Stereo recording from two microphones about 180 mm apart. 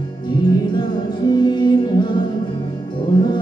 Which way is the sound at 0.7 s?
25° left (ahead or behind).